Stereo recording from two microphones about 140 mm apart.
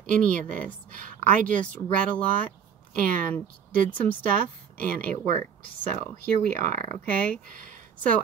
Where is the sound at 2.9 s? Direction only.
75° right (ahead or behind).